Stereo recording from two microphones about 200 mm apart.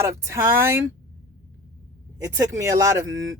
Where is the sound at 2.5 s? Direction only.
15° right (ahead or behind).